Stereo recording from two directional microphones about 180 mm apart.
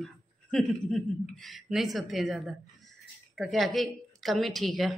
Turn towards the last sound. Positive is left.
turn(degrees=0)  # may be behind; listen again after turning